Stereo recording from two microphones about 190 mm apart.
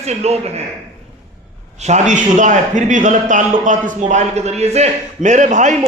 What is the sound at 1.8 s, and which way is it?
A man's voice, 40° right (ahead or behind).